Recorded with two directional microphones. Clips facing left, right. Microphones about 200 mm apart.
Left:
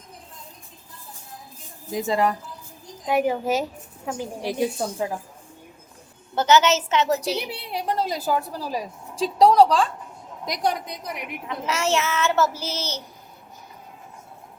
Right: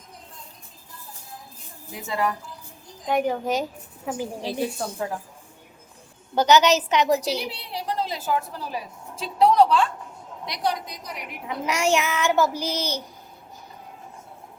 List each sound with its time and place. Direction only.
1.9 s a woman's voice: 35° left (ahead or behind)
3.1 s a woman's voice: 5° left (ahead or behind)
4.4 s a woman's voice: 15° left (ahead or behind)
6.3 s a woman's voice: 15° right (ahead or behind)
7.3 s a woman's voice: 55° left (ahead or behind); by 9.9 s 35° left (ahead or behind)
10.4 s a woman's voice: 45° left (ahead or behind)
11.4 s a woman's voice: 15° right (ahead or behind)